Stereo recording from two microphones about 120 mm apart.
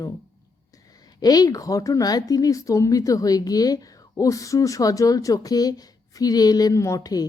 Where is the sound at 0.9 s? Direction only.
30° left (ahead or behind).